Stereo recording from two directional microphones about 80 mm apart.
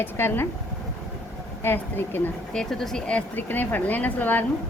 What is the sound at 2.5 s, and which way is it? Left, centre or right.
A woman's voice, centre.